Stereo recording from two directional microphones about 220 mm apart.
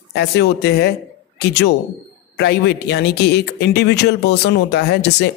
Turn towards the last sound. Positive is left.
turn(degrees=50)  # may be behind; listen again after turning